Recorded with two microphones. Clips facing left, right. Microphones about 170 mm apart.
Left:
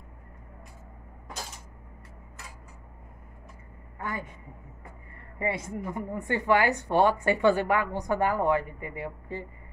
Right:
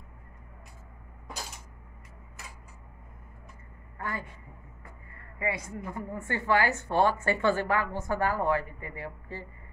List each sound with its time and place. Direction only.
4.0 s a woman's voice: 20° left (ahead or behind)
5.4 s a woman's voice: 25° left (ahead or behind)